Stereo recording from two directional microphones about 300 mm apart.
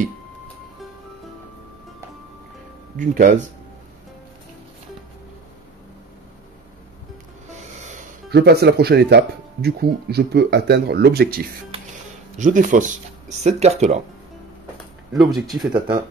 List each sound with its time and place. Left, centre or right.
3.0 s speech: right
7.8 s speech: right
15.3 s speech: centre